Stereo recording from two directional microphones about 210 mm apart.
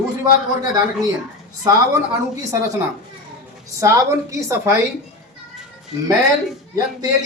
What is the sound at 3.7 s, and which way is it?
A man's voice, 15° right (ahead or behind).